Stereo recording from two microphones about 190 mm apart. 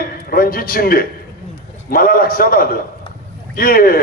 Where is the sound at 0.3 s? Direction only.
50° left (ahead or behind).